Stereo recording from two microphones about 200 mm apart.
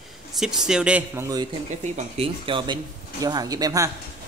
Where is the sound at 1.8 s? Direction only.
30° right (ahead or behind).